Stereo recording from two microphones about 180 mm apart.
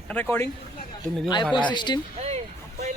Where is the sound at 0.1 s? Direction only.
10° left (ahead or behind).